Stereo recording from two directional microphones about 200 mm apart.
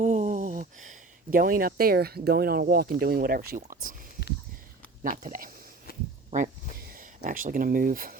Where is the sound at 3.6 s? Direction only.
45° right (ahead or behind).